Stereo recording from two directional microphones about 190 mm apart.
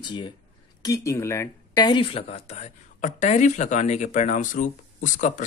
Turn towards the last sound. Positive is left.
turn(degrees=40)  # may be behind; listen again after turning